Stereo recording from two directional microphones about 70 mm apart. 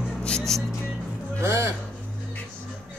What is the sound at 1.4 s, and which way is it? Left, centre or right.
Speech, right.